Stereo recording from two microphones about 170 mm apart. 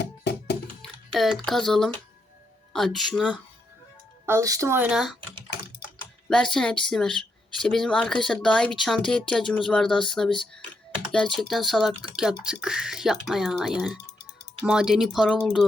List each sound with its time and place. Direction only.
0.0 s music: 80° left
0.8 s speech: centre (ahead or behind)
4.3 s speech: 20° right (ahead or behind)
6.2 s speech: 5° left (ahead or behind)